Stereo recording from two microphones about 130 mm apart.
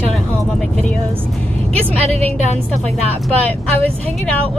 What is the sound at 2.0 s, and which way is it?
Speech, 50° right (ahead or behind).